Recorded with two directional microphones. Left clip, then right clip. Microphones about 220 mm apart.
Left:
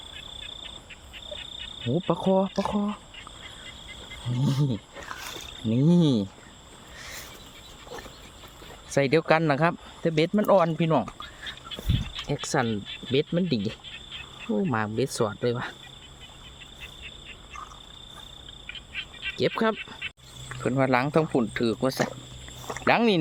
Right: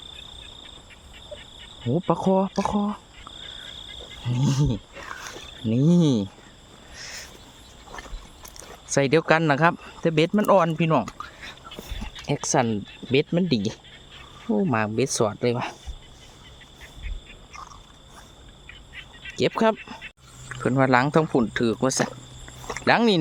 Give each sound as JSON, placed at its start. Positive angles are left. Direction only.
{"t": 1.9, "sound": "speech", "side_deg": -5}
{"t": 4.3, "sound": "speech", "side_deg": -15}
{"t": 8.9, "sound": "speech", "side_deg": -15}
{"t": 12.3, "sound": "speech", "side_deg": -15}
{"t": 14.4, "sound": "speech", "side_deg": -5}
{"t": 14.7, "sound": "speech", "side_deg": -15}
{"t": 19.4, "sound": "speech", "side_deg": -15}
{"t": 20.0, "sound": "a sound", "side_deg": 45}
{"t": 20.6, "sound": "speech", "side_deg": -20}
{"t": 22.6, "sound": "a sound", "side_deg": 0}
{"t": 22.9, "sound": "speech", "side_deg": -15}